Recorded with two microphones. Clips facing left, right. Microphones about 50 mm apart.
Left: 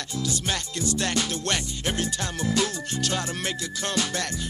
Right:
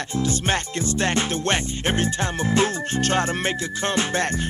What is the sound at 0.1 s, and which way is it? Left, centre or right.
Music, right.